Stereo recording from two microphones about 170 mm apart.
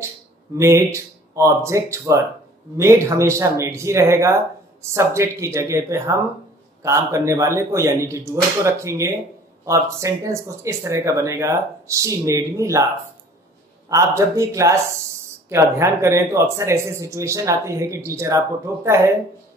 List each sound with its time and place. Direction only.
0.6 s a man's voice: 15° right (ahead or behind)
13.8 s a man's voice: 20° right (ahead or behind)